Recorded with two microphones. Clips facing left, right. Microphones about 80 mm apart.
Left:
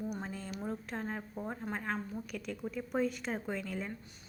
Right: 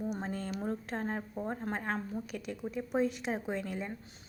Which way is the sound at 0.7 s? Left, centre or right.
Right.